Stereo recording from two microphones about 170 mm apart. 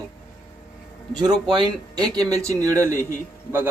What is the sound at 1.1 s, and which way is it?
Speech, 25° right (ahead or behind).